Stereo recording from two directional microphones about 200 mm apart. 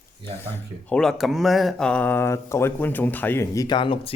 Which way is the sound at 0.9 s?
Centre (ahead or behind).